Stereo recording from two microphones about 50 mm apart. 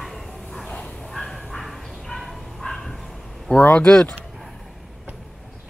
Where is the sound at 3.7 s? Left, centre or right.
Left.